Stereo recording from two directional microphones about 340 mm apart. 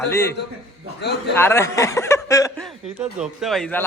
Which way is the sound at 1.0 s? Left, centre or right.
Left.